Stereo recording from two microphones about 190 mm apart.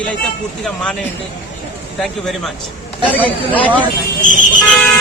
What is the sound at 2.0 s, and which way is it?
Speech, centre (ahead or behind).